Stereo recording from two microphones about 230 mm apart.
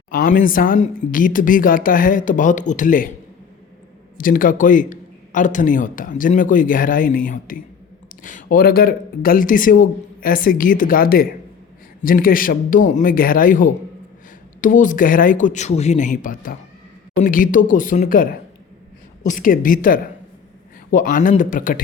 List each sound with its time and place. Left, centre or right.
0.1 s speech: left
4.2 s speech: left